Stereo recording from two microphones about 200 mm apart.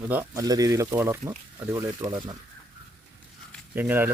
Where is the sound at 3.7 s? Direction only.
10° right (ahead or behind).